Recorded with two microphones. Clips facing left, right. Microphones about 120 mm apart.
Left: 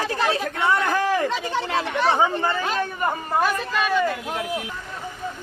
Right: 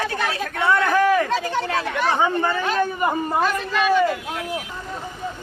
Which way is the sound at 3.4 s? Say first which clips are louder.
Right 2 dB; centre (ahead or behind).